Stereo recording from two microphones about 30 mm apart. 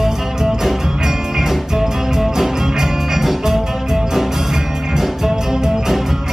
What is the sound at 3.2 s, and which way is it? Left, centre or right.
Music, centre.